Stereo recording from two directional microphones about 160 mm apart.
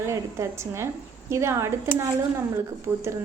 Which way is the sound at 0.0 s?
15° right (ahead or behind).